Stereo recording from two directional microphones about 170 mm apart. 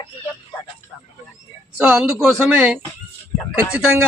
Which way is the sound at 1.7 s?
5° right (ahead or behind).